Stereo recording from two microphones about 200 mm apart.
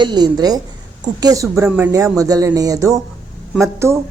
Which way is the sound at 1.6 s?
5° right (ahead or behind).